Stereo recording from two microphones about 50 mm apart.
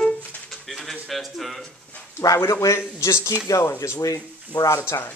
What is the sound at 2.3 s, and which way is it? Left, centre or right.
A man's voice, left.